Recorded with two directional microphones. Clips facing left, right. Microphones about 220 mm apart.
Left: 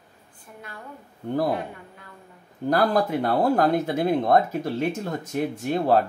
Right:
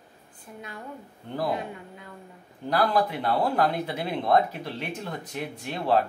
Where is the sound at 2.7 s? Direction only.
45° left (ahead or behind).